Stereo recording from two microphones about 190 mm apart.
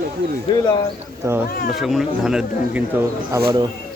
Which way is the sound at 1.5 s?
50° left (ahead or behind).